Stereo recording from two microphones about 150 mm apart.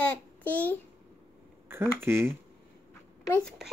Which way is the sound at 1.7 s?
15° right (ahead or behind).